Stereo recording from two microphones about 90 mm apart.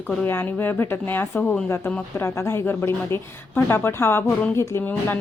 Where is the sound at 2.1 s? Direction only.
30° left (ahead or behind).